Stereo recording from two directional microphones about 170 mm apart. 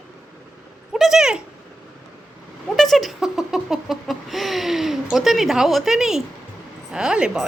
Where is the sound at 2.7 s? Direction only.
Centre (ahead or behind).